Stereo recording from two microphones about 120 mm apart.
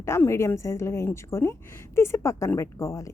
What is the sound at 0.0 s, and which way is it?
A woman's voice, 20° left (ahead or behind).